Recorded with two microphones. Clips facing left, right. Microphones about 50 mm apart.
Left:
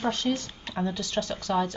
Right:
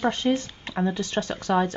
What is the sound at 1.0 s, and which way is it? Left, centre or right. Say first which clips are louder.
Speech: right 3 dB; right.